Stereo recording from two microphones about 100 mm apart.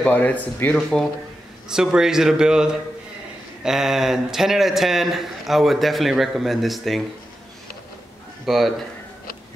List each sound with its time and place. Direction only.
0.0 s speech: 15° left (ahead or behind)
0.7 s a man's voice: 5° left (ahead or behind)
8.5 s a man's voice: centre (ahead or behind)